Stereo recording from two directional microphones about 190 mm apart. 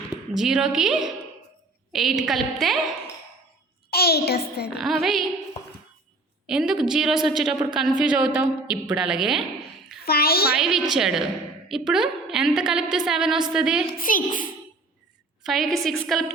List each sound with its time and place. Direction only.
0.3 s a woman's voice: centre (ahead or behind)
3.8 s a child's voice: 55° left (ahead or behind)
4.8 s a woman's voice: centre (ahead or behind)
6.5 s a woman's voice: 5° right (ahead or behind)
10.1 s a child's voice: 55° left (ahead or behind)
10.6 s a woman's voice: centre (ahead or behind)
14.0 s a child's voice: 45° left (ahead or behind)
15.4 s a woman's voice: centre (ahead or behind)